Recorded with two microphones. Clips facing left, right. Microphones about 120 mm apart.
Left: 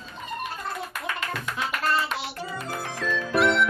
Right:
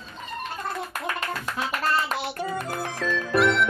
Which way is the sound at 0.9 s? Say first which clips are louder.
Right 2 dB; 40° right (ahead or behind).